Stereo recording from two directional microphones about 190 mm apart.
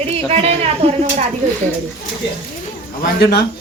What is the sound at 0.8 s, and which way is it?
Speech, 35° right (ahead or behind).